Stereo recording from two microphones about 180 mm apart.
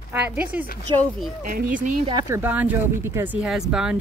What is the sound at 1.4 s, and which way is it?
Speech, 45° right (ahead or behind).